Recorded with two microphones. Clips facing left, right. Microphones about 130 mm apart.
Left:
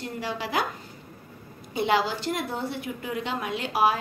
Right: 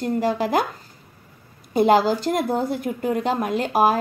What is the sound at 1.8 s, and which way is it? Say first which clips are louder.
A woman's voice: right 8 dB; 45° right (ahead or behind).